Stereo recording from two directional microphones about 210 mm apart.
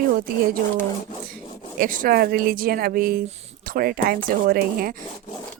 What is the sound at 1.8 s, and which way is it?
Speech, 40° right (ahead or behind).